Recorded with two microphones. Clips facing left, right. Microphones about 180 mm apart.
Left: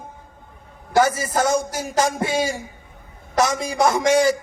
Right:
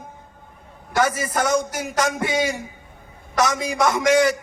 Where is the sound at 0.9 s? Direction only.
25° left (ahead or behind).